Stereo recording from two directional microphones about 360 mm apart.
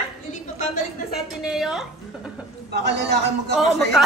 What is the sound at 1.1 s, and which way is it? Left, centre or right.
Speech, centre.